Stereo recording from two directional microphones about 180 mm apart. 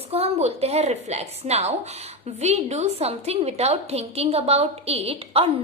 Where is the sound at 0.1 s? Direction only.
35° right (ahead or behind).